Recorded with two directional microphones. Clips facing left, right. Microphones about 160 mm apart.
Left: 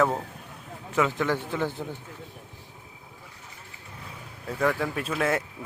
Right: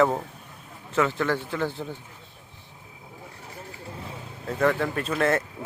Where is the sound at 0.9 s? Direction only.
15° left (ahead or behind).